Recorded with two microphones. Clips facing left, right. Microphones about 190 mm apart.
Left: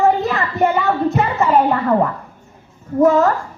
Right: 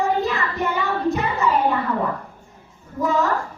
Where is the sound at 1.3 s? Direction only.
60° left (ahead or behind).